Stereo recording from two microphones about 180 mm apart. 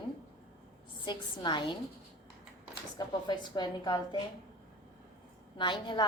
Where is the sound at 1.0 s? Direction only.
25° left (ahead or behind).